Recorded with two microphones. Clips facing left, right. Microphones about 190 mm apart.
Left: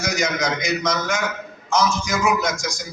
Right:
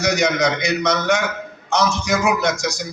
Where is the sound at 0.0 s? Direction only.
70° right (ahead or behind).